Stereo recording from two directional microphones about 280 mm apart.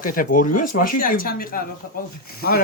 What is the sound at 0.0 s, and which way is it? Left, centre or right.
Speech, left.